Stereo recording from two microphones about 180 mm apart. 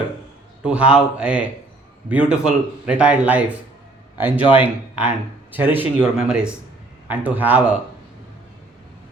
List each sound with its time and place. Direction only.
0.6 s speech: 5° right (ahead or behind)